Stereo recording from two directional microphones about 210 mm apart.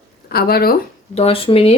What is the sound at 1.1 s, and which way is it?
Speech, 25° left (ahead or behind).